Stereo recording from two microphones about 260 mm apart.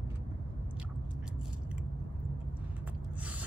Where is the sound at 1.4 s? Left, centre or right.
Centre.